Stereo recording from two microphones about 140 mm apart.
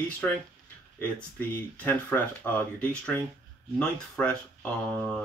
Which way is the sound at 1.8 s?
10° left (ahead or behind).